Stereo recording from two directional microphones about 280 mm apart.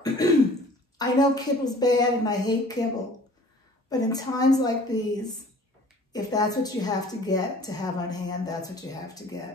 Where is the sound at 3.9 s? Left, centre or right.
Centre.